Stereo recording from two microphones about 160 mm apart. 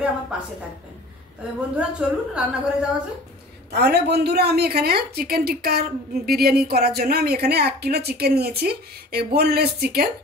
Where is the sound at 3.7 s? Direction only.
90° right.